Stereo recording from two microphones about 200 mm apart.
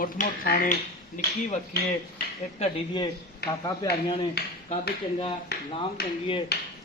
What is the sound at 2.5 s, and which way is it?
Speech, 25° left (ahead or behind).